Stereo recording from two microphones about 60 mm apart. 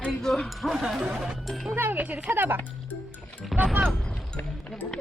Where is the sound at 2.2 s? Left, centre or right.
Right.